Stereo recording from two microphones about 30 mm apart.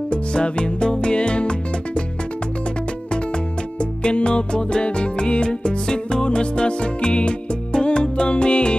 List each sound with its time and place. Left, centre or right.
0.1 s music: left
4.0 s music: left